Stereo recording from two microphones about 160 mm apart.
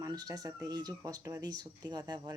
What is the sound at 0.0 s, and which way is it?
Speech, 25° right (ahead or behind).